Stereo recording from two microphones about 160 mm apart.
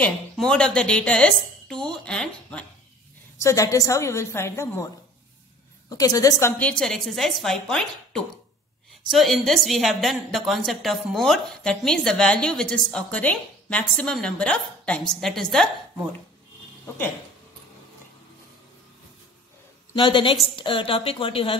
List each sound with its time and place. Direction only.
0.0 s a woman's voice: 5° left (ahead or behind)
3.3 s a woman's voice: 20° left (ahead or behind)
5.9 s a woman's voice: 20° left (ahead or behind)
6.6 s a woman's voice: 5° left (ahead or behind)
20.0 s a woman's voice: 30° left (ahead or behind)